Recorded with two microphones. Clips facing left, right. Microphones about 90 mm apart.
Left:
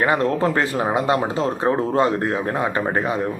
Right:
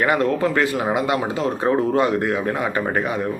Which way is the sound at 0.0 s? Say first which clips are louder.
Even; 30° left (ahead or behind).